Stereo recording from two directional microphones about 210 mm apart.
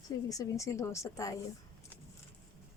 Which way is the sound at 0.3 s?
15° left (ahead or behind).